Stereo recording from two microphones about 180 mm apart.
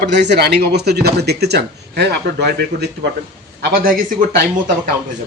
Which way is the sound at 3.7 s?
50° right (ahead or behind).